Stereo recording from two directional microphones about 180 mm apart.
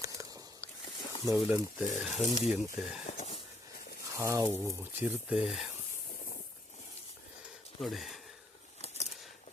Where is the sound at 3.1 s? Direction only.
35° left (ahead or behind).